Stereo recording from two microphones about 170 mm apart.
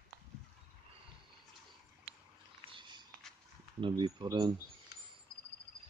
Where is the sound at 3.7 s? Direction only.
30° right (ahead or behind).